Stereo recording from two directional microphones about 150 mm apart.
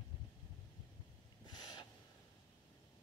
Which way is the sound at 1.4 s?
30° left (ahead or behind).